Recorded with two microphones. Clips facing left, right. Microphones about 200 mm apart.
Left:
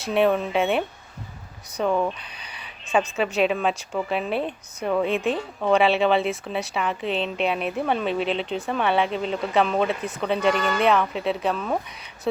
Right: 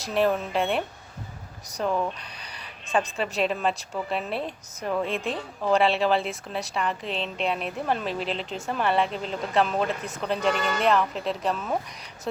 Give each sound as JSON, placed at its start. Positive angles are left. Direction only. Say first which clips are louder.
{"t": 0.0, "sound": "a woman's voice", "louder": "left 3 dB", "side_deg": 0}
{"t": 2.4, "sound": "a sound", "louder": "even", "side_deg": 5}
{"t": 3.2, "sound": "a woman's voice", "louder": "left 4 dB", "side_deg": 0}
{"t": 5.0, "sound": "a woman's voice", "louder": "left 6 dB", "side_deg": -35}
{"t": 5.6, "sound": "a woman's voice", "louder": "left 3 dB", "side_deg": 0}